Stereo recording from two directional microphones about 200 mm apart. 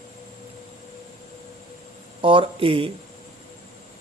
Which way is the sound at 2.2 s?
25° right (ahead or behind).